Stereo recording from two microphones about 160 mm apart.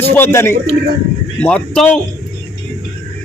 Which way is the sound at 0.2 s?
15° left (ahead or behind).